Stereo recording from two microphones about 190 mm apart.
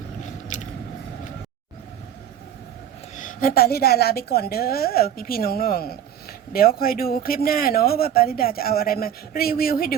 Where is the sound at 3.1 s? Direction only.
45° left (ahead or behind).